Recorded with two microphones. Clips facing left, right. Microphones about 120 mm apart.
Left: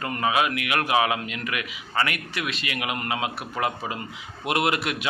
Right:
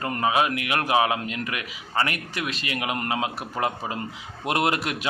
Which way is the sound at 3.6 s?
25° right (ahead or behind).